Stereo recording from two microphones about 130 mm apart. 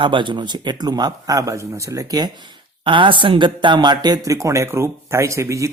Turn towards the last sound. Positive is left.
turn(degrees=-20)  # may be behind; listen again after turning